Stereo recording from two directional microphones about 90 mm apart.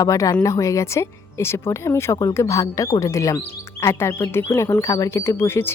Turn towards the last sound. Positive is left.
turn(degrees=25)  # may be behind; listen again after turning